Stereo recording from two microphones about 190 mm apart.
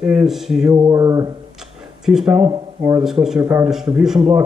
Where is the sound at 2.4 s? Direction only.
20° right (ahead or behind).